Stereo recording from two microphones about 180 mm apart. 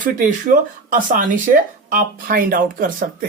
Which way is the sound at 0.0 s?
50° right (ahead or behind).